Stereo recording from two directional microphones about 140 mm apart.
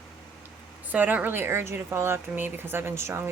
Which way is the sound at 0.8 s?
10° right (ahead or behind).